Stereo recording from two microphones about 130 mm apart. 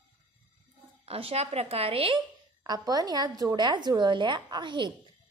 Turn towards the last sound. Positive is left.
turn(degrees=-35)  # may be behind; listen again after turning